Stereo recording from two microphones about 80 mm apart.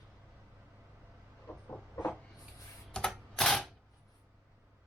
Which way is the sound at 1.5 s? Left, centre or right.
Centre.